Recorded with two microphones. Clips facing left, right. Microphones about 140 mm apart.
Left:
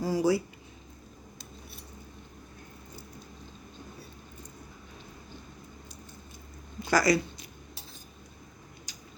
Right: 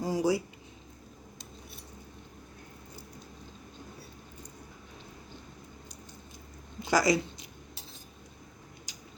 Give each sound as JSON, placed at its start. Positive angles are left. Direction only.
{"t": 0.0, "sound": "speech", "side_deg": -20}
{"t": 6.8, "sound": "speech", "side_deg": -20}
{"t": 8.9, "sound": "a sound", "side_deg": -15}